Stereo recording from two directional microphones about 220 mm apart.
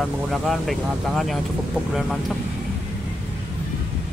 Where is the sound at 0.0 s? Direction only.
Centre (ahead or behind).